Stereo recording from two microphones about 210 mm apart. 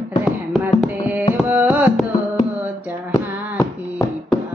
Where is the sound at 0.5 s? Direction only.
5° right (ahead or behind).